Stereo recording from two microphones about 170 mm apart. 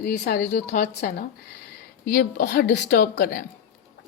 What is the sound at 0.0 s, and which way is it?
A woman's voice, 70° left (ahead or behind).